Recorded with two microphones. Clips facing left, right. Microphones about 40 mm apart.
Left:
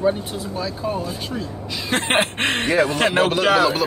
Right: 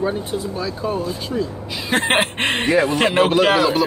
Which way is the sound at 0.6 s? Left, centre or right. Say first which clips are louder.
Left 1 dB; centre.